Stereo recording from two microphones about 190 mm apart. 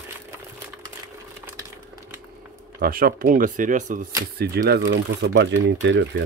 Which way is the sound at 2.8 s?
50° right (ahead or behind).